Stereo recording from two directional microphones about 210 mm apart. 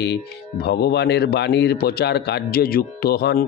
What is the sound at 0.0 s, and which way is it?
Speech, 50° left (ahead or behind).